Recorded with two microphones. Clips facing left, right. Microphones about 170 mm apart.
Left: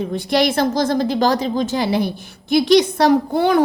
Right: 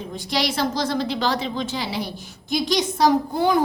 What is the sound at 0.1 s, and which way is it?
A woman's voice, 60° left (ahead or behind).